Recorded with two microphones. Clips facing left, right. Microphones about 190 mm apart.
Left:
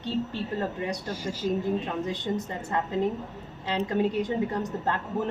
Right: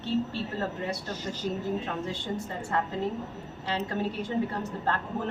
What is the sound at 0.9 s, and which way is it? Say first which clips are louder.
A woman's voice: left 2 dB; 10° left (ahead or behind).